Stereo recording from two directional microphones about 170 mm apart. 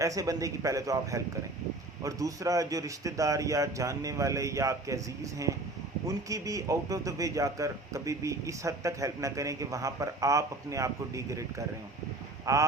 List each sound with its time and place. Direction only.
0.0 s a man's voice: 20° right (ahead or behind)
6.1 s a man's voice: 20° right (ahead or behind)
12.5 s speech: 15° right (ahead or behind)